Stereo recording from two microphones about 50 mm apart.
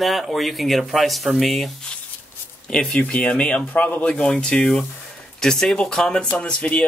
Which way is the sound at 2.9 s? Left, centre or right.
Left.